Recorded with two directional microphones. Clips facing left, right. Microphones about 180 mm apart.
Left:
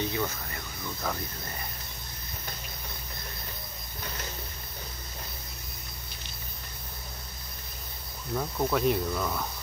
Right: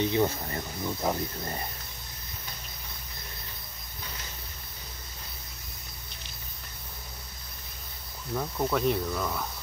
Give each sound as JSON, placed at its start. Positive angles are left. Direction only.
{"t": 0.0, "sound": "speech", "side_deg": -25}
{"t": 8.4, "sound": "speech", "side_deg": 0}